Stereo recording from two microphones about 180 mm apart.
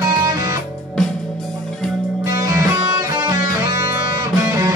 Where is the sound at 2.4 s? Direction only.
15° right (ahead or behind).